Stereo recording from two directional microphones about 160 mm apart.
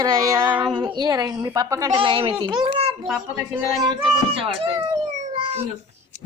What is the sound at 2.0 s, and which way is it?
Speech, 35° right (ahead or behind).